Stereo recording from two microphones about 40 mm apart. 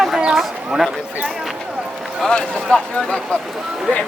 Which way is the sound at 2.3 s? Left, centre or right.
Left.